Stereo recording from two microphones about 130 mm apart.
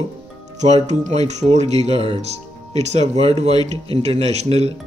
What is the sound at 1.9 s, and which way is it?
Speech, 50° right (ahead or behind).